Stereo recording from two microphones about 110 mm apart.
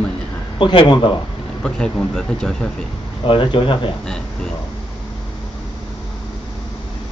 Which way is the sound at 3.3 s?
50° left (ahead or behind).